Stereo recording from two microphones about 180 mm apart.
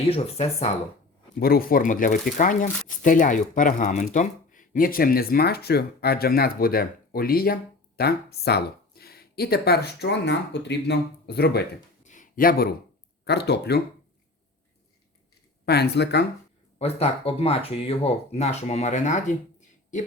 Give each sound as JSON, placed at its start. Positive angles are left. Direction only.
{"t": 0.1, "sound": "speech", "side_deg": 35}
{"t": 1.4, "sound": "speech", "side_deg": 55}
{"t": 12.0, "sound": "a sound", "side_deg": 45}
{"t": 13.2, "sound": "speech", "side_deg": 65}
{"t": 15.6, "sound": "speech", "side_deg": 65}
{"t": 16.7, "sound": "speech", "side_deg": 35}